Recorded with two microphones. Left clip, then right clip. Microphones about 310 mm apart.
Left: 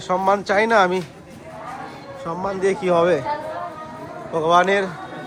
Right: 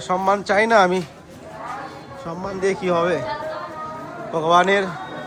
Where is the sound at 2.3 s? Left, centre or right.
Centre.